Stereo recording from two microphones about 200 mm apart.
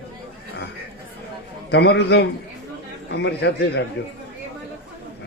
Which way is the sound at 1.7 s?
55° left (ahead or behind).